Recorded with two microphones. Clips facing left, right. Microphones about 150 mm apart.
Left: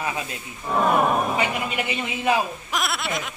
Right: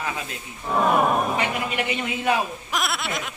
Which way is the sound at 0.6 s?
Centre (ahead or behind).